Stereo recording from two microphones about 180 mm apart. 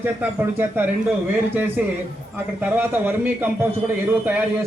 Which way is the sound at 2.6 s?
10° right (ahead or behind).